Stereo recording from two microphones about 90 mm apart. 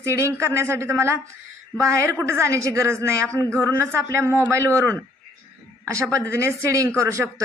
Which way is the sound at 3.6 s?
30° right (ahead or behind).